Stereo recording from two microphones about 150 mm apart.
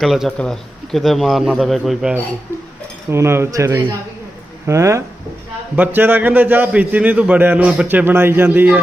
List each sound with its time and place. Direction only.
0.0 s speech: centre (ahead or behind)
3.1 s a man's voice: 15° right (ahead or behind)